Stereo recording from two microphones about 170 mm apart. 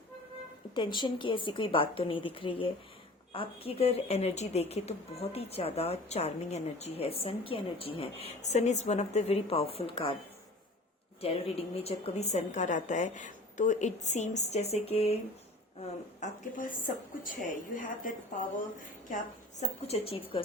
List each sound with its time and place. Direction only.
0.7 s speech: 25° left (ahead or behind)
11.2 s speech: 35° left (ahead or behind)
15.8 s a woman's voice: 50° left (ahead or behind)
19.5 s speech: 35° left (ahead or behind)